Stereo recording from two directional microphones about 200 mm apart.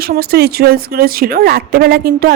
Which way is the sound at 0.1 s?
50° right (ahead or behind).